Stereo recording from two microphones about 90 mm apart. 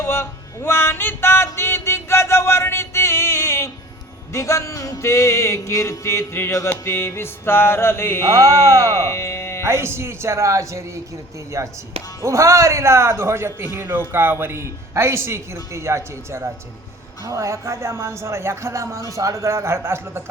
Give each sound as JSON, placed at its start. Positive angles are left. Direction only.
{"t": 0.0, "sound": "a sound", "side_deg": 25}
{"t": 4.3, "sound": "music", "side_deg": 35}
{"t": 6.7, "sound": "mantra", "side_deg": 25}
{"t": 8.3, "sound": "speech", "side_deg": -40}
{"t": 8.9, "sound": "speech", "side_deg": 30}
{"t": 9.6, "sound": "a man's voice", "side_deg": -30}